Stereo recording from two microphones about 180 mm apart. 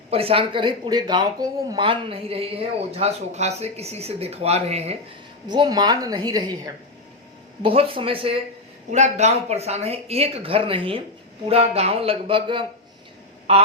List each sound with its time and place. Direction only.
0.1 s speech: 30° right (ahead or behind)
5.5 s a woman's voice: 25° right (ahead or behind)
7.6 s a woman's voice: 30° right (ahead or behind)